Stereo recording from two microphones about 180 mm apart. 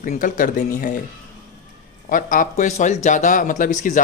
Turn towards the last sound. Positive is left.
turn(degrees=45)  # may be behind; listen again after turning